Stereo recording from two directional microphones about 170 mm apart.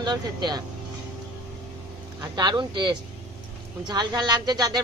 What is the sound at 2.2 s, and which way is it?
Speech, 25° right (ahead or behind).